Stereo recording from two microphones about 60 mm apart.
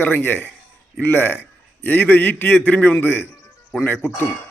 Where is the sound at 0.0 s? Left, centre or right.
Left.